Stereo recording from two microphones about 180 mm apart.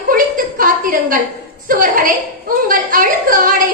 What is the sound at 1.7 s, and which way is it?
A woman's voice, 50° right (ahead or behind).